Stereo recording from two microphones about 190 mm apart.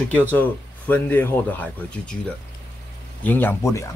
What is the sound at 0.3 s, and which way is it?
Speech, 10° left (ahead or behind).